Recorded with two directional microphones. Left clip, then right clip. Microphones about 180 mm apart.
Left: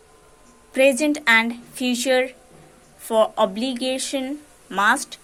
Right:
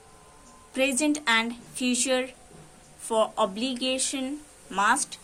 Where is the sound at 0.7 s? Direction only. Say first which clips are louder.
Left 8 dB; 30° left (ahead or behind).